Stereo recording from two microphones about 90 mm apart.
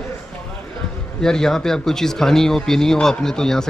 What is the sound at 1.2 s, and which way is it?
Speech, 5° left (ahead or behind).